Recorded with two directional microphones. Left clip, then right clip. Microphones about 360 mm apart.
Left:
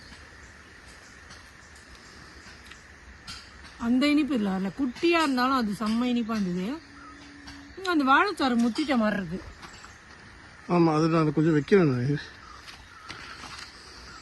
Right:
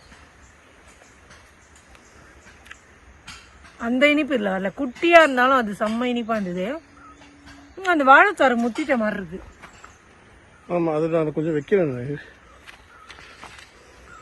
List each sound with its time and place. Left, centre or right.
3.8 s speech: centre
7.8 s speech: centre
8.9 s speech: centre
10.7 s speech: centre